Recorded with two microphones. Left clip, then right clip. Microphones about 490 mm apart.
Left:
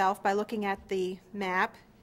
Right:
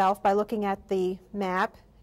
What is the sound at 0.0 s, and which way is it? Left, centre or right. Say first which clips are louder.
A woman's voice: right 4 dB; right.